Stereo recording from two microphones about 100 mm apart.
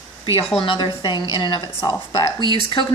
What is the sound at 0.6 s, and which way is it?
A woman's voice, 55° left (ahead or behind).